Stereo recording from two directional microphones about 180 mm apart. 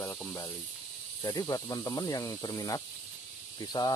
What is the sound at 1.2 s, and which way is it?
Cricket, 20° left (ahead or behind).